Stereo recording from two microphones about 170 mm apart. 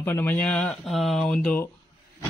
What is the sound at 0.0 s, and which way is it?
Speech, 10° left (ahead or behind).